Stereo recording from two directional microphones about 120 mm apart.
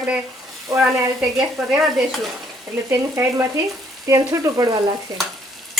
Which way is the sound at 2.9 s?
25° right (ahead or behind).